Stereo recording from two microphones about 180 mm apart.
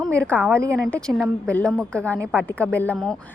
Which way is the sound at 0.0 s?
5° left (ahead or behind).